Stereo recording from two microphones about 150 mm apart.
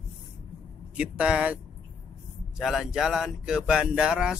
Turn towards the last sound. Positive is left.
turn(degrees=-5)  # may be behind; listen again after turning